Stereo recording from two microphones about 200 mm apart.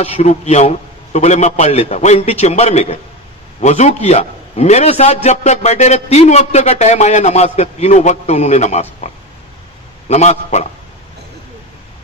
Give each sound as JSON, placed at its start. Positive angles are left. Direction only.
{"t": 0.0, "sound": "a man's voice", "side_deg": 30}